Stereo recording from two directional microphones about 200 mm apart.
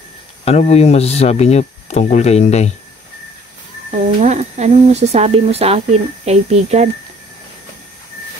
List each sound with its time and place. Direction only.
0.5 s speech: 30° left (ahead or behind)
3.9 s speech: 35° right (ahead or behind)